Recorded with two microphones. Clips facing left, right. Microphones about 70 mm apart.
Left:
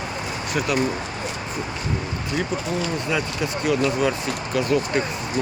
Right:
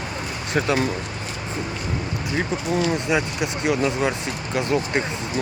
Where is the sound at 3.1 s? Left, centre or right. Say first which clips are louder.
Right 2 dB; centre.